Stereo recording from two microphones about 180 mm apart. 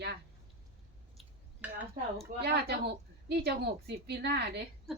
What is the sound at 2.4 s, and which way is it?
A woman's voice, 65° right (ahead or behind).